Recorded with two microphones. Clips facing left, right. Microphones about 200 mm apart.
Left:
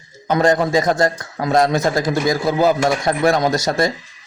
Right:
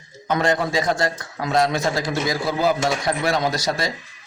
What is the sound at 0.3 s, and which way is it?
A man's voice, 40° left (ahead or behind).